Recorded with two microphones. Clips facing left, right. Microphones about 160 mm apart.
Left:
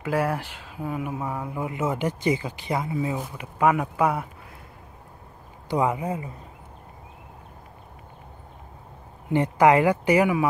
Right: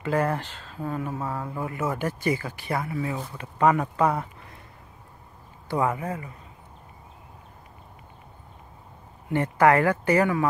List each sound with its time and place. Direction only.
0.0 s speech: 5° left (ahead or behind)
5.7 s speech: 15° left (ahead or behind)
9.3 s speech: 15° left (ahead or behind)